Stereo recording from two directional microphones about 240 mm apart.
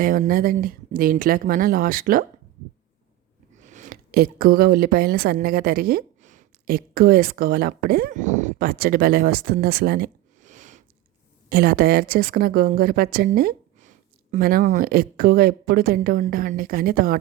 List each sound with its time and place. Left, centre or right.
0.0 s speech: right
3.5 s speech: right